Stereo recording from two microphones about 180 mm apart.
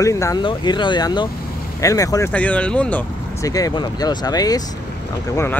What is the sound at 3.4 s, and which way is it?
Speech, 20° left (ahead or behind).